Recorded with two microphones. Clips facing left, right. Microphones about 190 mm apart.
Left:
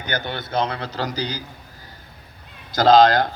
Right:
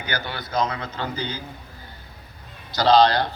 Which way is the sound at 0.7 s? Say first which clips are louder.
Left 3 dB; 35° left (ahead or behind).